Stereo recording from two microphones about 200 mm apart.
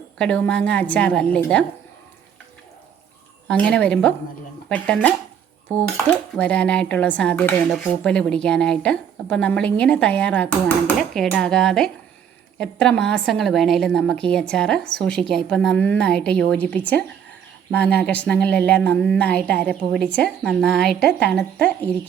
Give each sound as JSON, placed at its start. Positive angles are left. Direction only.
{"t": 0.2, "sound": "a woman's voice", "side_deg": 5}
{"t": 3.5, "sound": "a woman's voice", "side_deg": 5}
{"t": 6.3, "sound": "a woman's voice", "side_deg": 5}